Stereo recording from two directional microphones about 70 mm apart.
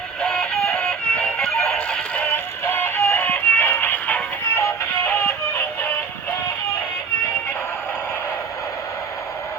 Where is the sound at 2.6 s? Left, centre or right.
Left.